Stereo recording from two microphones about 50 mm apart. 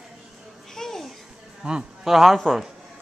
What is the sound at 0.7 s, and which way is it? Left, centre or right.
Babbling, centre.